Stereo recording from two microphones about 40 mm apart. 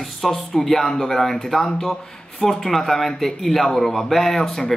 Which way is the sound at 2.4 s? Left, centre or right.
Centre.